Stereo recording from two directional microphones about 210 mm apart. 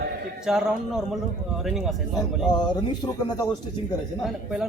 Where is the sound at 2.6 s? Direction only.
20° left (ahead or behind).